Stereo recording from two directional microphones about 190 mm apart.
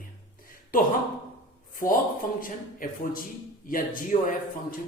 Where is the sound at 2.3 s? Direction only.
45° left (ahead or behind).